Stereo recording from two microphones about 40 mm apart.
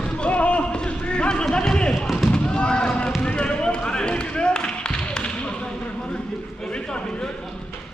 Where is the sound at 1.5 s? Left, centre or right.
Left.